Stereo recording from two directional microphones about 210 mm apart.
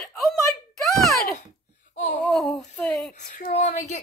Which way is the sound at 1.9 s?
35° left (ahead or behind).